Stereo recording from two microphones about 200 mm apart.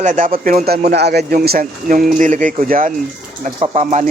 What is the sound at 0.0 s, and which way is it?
Speech, 40° right (ahead or behind).